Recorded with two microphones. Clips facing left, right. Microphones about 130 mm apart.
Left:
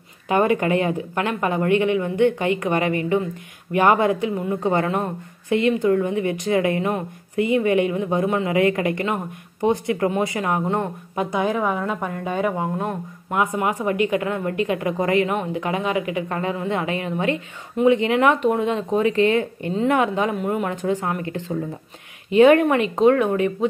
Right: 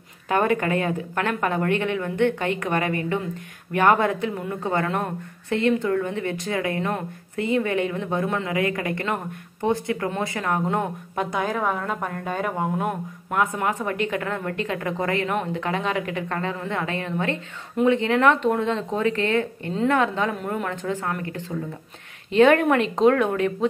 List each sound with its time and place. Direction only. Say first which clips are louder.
0.6 s speech: left 3 dB; 15° left (ahead or behind)
4.8 s speech: left 2 dB; 5° left (ahead or behind)
5.9 s speech: left 5 dB; 25° left (ahead or behind)
8.5 s speech: left 5 dB; 25° left (ahead or behind)
9.0 s speech: left 2 dB; 10° left (ahead or behind)
9.7 s speech: left 3 dB; 20° left (ahead or behind)
10.7 s a woman's voice: left 1 dB; centre (ahead or behind); by 21.5 s 20° left (ahead or behind)
22.3 s a woman's voice: left 3 dB; 5° left (ahead or behind)